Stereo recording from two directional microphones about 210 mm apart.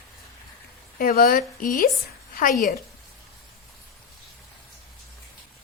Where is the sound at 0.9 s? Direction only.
45° left (ahead or behind).